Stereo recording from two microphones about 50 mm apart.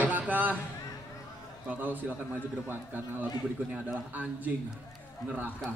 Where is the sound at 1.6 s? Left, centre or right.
Right.